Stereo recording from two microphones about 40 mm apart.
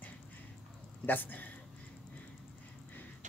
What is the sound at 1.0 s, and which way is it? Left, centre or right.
Speech, left.